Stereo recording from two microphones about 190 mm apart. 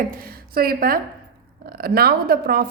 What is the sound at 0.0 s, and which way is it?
A woman's voice, 50° right (ahead or behind).